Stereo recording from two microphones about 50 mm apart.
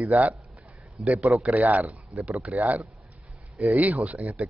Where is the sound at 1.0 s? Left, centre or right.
Right.